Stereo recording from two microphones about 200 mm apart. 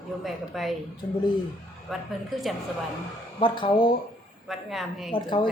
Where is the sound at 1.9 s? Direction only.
Centre (ahead or behind).